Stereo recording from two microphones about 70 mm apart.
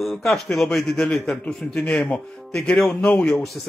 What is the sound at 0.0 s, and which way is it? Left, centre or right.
A man's voice, centre.